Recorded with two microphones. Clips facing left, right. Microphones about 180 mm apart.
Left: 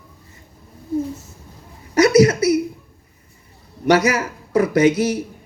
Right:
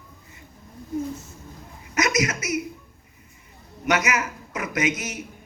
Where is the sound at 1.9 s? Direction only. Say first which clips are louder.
Left 12 dB; 35° left (ahead or behind).